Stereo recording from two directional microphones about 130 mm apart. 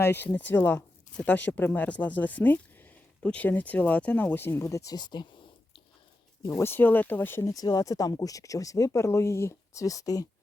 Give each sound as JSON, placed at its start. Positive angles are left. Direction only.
{"t": 0.0, "sound": "speech", "side_deg": 15}
{"t": 6.6, "sound": "speech", "side_deg": 15}